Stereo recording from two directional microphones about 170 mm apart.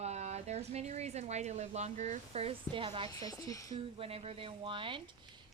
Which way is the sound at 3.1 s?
20° left (ahead or behind).